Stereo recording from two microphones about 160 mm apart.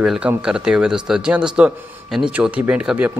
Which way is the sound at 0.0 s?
Centre (ahead or behind).